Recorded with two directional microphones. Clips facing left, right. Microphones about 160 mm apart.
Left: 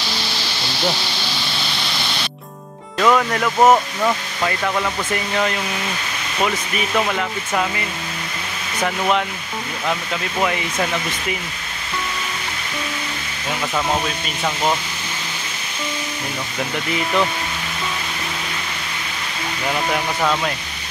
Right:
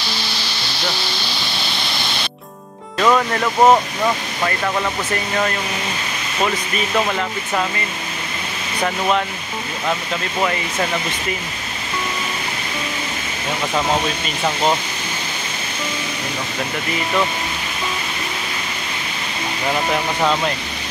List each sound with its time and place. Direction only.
3.0 s speech: 5° right (ahead or behind)